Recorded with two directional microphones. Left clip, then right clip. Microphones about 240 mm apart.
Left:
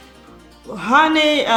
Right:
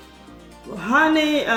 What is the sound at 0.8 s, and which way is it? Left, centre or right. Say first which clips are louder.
Speech: left 4 dB; left.